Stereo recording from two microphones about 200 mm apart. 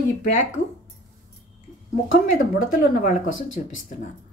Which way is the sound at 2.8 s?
45° left (ahead or behind).